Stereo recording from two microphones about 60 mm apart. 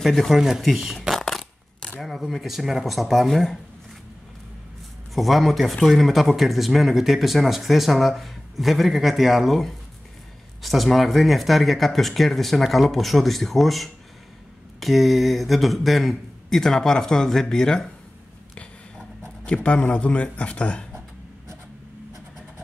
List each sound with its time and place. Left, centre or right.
0.0 s speech: centre
1.2 s coin: centre
2.0 s speech: centre
5.1 s speech: centre
19.2 s speech: centre